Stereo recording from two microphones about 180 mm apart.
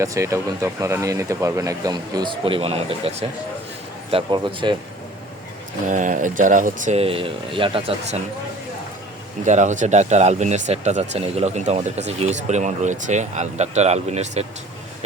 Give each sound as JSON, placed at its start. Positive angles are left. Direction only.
{"t": 0.0, "sound": "speech", "side_deg": -15}
{"t": 5.9, "sound": "speech", "side_deg": -45}
{"t": 9.4, "sound": "speech", "side_deg": -40}